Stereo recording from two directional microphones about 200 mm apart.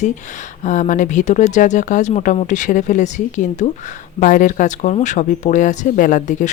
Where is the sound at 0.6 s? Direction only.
40° left (ahead or behind).